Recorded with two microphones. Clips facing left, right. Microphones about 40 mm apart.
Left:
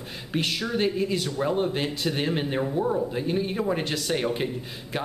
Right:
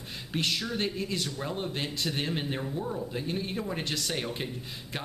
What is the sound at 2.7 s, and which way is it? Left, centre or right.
Speech, left.